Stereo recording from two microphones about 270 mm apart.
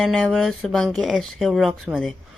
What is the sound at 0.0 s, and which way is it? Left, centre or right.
Speech, centre.